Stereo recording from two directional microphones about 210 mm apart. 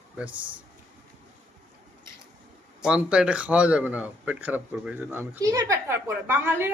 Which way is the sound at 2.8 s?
5° right (ahead or behind).